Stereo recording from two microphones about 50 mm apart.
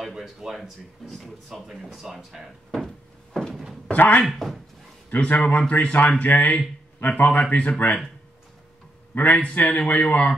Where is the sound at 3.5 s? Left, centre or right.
Centre.